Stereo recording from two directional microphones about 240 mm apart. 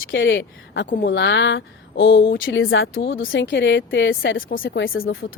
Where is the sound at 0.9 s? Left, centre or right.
Left.